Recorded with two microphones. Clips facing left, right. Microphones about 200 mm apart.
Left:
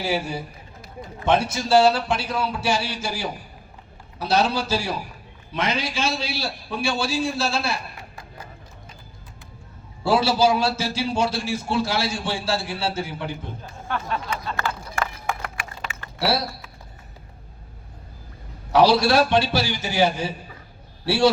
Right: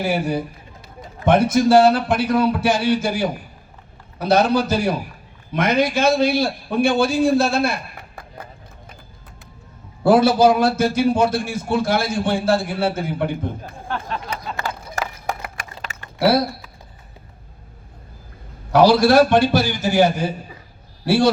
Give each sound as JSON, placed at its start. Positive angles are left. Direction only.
{"t": 0.0, "sound": "a man's voice", "side_deg": -55}
{"t": 10.0, "sound": "a man's voice", "side_deg": -55}
{"t": 14.6, "sound": "a sound", "side_deg": -40}
{"t": 16.1, "sound": "speech", "side_deg": -55}
{"t": 18.7, "sound": "a man's voice", "side_deg": -50}